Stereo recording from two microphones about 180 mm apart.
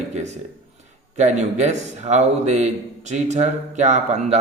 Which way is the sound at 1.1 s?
40° right (ahead or behind).